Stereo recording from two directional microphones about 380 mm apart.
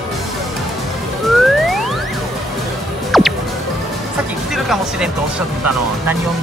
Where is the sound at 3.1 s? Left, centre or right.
Centre.